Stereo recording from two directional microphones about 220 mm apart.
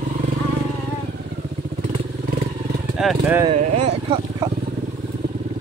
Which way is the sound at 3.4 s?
30° right (ahead or behind).